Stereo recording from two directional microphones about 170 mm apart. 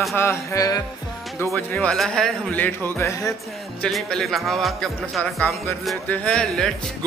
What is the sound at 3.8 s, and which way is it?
Speech, centre (ahead or behind).